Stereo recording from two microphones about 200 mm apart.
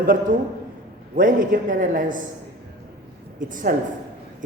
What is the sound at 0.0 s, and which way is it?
A man's voice, 45° right (ahead or behind).